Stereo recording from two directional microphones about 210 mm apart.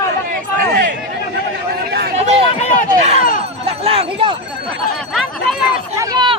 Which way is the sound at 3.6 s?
30° right (ahead or behind).